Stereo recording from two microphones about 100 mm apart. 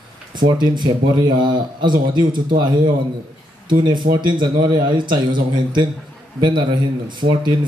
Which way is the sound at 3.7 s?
50° right (ahead or behind).